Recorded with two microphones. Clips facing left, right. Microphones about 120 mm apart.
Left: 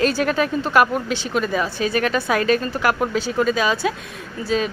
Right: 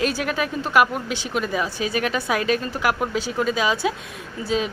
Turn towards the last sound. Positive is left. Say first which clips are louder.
# left 2 dB
turn(degrees=-15)  # may be behind; listen again after turning